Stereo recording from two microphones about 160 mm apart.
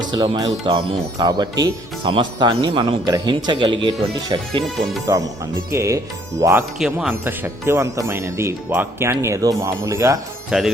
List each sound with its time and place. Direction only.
0.1 s speech: 25° right (ahead or behind)
6.7 s speech: 5° right (ahead or behind)
7.1 s speech: 15° right (ahead or behind)
10.5 s speech: 5° right (ahead or behind)